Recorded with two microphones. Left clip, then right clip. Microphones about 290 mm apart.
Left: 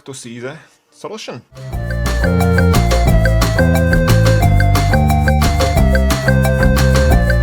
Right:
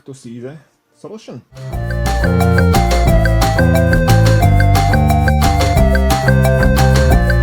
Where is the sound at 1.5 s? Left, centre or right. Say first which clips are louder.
Right 1 dB; centre.